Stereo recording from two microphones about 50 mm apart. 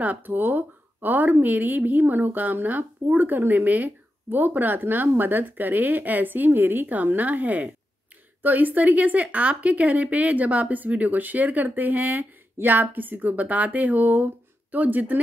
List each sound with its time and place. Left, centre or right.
0.0 s speech: right